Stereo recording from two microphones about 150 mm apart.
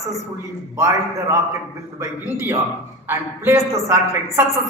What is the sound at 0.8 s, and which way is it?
A man's voice, 20° right (ahead or behind).